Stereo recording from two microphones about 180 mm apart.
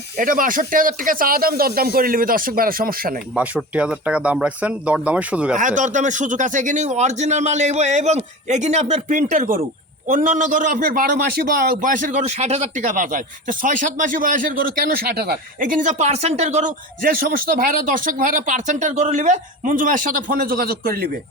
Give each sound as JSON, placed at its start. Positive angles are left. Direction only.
{"t": 0.2, "sound": "a man's voice", "side_deg": -50}
{"t": 3.3, "sound": "speech", "side_deg": -5}
{"t": 5.5, "sound": "a man's voice", "side_deg": -45}